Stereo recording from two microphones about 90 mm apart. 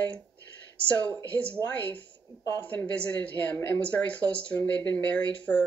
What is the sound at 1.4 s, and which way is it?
A woman's voice, 15° left (ahead or behind).